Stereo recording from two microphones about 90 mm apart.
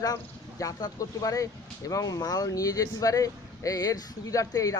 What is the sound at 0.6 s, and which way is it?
Speech, 40° left (ahead or behind).